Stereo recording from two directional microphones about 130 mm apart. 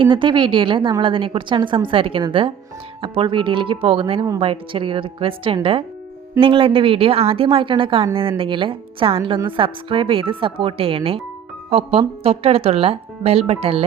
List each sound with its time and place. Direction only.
0.0 s a woman's voice: 40° right (ahead or behind)